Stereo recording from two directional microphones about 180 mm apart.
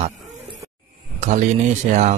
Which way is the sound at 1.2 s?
40° right (ahead or behind).